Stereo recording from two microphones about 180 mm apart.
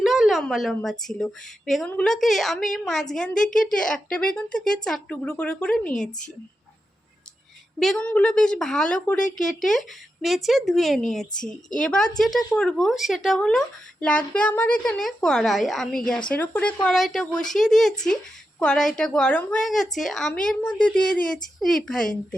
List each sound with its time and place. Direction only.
0.0 s a woman's voice: centre (ahead or behind)
5.9 s a woman's voice: 45° left (ahead or behind)
7.8 s speech: 5° left (ahead or behind)